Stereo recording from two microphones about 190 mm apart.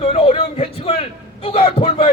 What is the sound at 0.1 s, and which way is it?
A man's voice, 35° left (ahead or behind).